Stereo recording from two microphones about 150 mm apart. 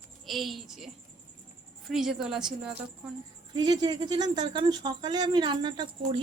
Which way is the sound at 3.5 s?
30° right (ahead or behind).